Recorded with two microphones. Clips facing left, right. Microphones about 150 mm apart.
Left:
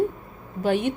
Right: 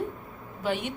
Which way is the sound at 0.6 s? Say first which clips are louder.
Left 7 dB; 50° left (ahead or behind).